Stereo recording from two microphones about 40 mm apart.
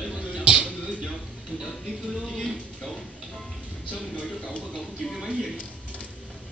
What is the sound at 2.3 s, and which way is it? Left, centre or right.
Speech, centre.